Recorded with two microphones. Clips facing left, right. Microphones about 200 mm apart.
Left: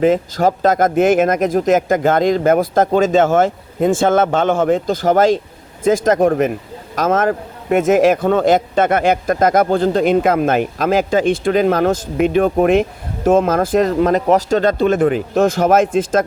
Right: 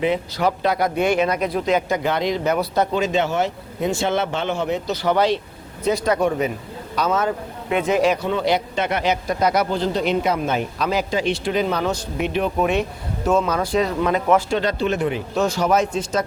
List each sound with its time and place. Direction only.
0.0 s speech: 45° left (ahead or behind)